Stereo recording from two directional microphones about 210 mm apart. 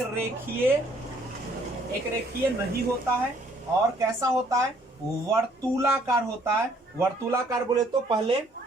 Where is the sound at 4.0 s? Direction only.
15° right (ahead or behind).